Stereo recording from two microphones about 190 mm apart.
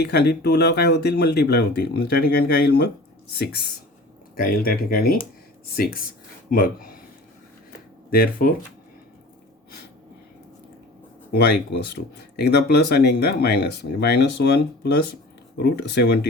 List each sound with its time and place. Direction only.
0.0 s speech: 60° left (ahead or behind)
8.1 s speech: 50° left (ahead or behind)
11.3 s speech: 60° left (ahead or behind)